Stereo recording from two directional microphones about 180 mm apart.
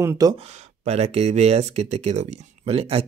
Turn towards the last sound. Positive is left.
turn(degrees=-30)  # may be behind; listen again after turning